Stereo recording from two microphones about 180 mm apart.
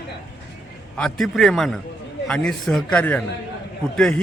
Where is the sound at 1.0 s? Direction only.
Centre (ahead or behind).